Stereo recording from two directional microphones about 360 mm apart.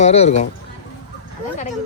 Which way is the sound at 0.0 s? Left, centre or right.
Centre.